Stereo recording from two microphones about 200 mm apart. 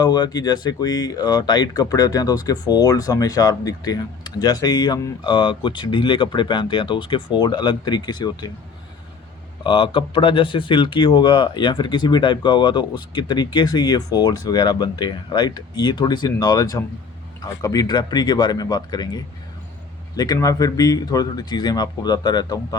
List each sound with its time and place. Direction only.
0.0 s speech: 20° left (ahead or behind)
9.6 s speech: 25° left (ahead or behind)